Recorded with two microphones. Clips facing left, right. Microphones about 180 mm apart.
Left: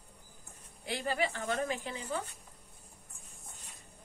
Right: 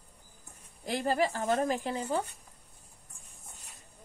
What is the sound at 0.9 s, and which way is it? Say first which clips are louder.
A woman's voice: right 5 dB; 40° right (ahead or behind).